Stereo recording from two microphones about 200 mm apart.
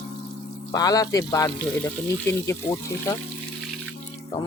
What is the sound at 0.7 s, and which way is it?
Speech, 20° left (ahead or behind).